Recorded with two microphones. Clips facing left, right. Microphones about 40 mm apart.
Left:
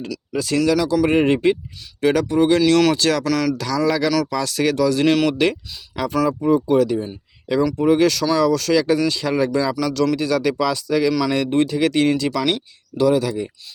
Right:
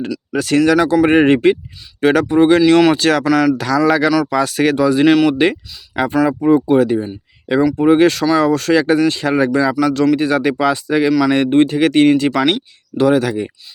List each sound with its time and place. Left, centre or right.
0.3 s speech: right
2.6 s speech: right
3.0 s speech: right
3.2 s speech: centre
3.6 s speech: right
5.0 s speech: centre
5.3 s speech: right
6.4 s speech: right
9.8 s speech: right